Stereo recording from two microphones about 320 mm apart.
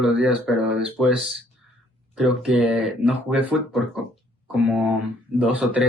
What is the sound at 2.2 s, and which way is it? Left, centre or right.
Speech, centre.